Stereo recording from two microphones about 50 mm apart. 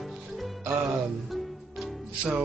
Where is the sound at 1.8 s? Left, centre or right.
Centre.